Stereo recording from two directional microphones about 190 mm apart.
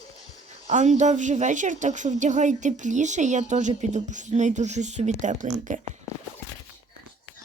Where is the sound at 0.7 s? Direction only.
40° right (ahead or behind).